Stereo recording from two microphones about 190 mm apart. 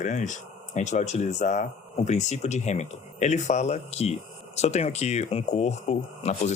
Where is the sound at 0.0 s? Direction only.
40° left (ahead or behind).